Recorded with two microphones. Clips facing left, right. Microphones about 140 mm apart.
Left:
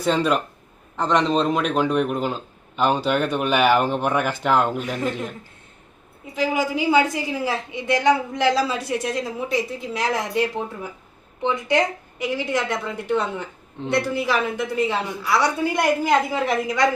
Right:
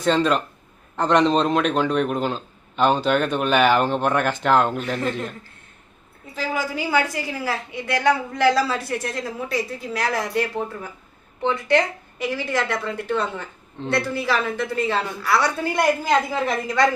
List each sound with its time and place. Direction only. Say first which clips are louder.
0.0 s a woman's voice: right 1 dB; 10° left (ahead or behind)
0.9 s a man's voice: right 2 dB; centre (ahead or behind)
6.3 s a woman's voice: left 4 dB; 15° left (ahead or behind)